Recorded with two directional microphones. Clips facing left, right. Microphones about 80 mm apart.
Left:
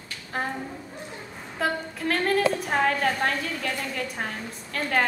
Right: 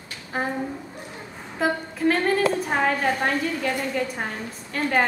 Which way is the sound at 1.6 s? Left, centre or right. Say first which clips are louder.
Right 4 dB; centre.